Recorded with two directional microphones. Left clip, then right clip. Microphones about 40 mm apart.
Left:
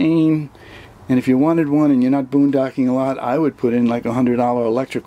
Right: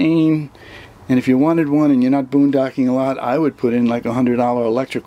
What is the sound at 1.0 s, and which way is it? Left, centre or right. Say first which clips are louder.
Speech: right 1 dB; centre.